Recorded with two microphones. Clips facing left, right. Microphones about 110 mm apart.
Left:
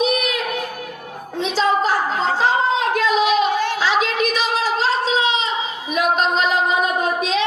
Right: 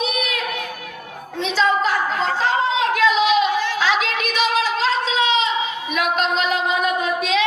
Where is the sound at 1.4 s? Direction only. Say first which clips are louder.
Left 1 dB; 40° left (ahead or behind).